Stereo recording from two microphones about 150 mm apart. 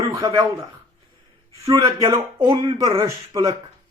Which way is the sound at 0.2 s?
25° right (ahead or behind).